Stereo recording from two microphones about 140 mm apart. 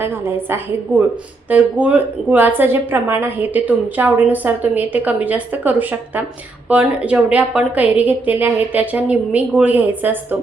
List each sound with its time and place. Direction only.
0.0 s a woman's voice: 15° right (ahead or behind)